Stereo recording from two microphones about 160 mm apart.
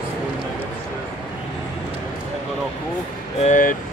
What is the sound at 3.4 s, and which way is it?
Speech, 55° left (ahead or behind).